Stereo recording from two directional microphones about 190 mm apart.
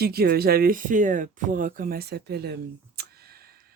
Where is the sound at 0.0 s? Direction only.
55° right (ahead or behind).